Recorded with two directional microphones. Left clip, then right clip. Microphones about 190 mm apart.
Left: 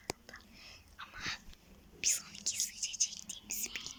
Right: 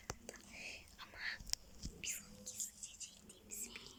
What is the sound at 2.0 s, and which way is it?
Whispering, 20° left (ahead or behind).